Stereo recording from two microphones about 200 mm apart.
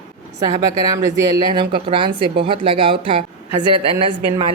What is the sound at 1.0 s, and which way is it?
A woman's voice, 20° right (ahead or behind).